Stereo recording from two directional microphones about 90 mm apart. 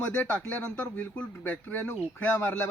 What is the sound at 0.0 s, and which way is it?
A man's voice, 25° left (ahead or behind).